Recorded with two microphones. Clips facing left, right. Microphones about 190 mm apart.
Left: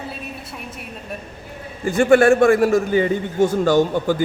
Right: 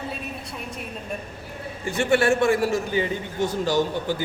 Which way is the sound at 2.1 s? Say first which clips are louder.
Left 7 dB; 50° left (ahead or behind).